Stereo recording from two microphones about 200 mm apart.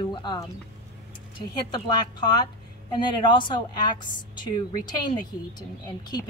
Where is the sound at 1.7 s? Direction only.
20° left (ahead or behind).